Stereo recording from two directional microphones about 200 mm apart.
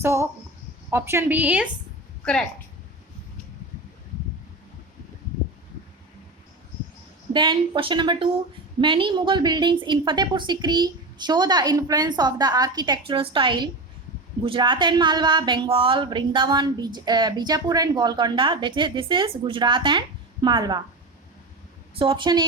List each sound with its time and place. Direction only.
0.0 s a woman's voice: 15° right (ahead or behind)
7.3 s speech: 25° right (ahead or behind)
21.9 s speech: 25° right (ahead or behind)